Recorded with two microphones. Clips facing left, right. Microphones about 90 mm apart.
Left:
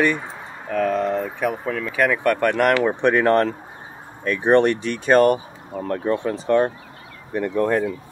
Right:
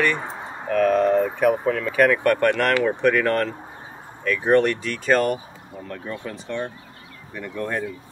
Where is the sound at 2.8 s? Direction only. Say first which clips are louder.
Left 2 dB; 25° left (ahead or behind).